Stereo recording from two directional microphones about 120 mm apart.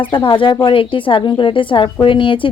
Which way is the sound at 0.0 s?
40° left (ahead or behind).